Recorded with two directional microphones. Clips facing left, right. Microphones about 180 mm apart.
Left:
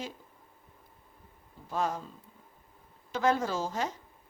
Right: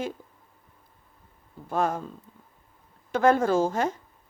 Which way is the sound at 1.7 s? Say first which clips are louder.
Right 5 dB; 55° right (ahead or behind).